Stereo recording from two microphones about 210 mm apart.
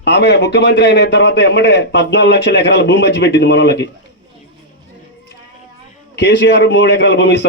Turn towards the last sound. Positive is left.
turn(degrees=55)  # may be behind; listen again after turning